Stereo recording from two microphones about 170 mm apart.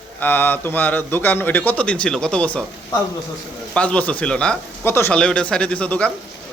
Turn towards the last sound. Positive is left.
turn(degrees=5)  # may be behind; listen again after turning